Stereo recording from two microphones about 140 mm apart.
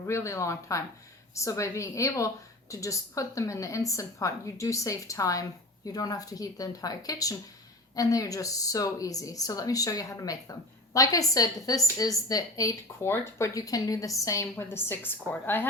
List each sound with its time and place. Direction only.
0.0 s a woman's voice: 20° left (ahead or behind)